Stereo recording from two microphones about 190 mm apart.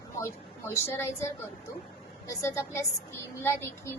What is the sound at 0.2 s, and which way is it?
Speech, 15° left (ahead or behind).